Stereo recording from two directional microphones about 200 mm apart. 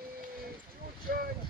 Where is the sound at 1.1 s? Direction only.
50° right (ahead or behind).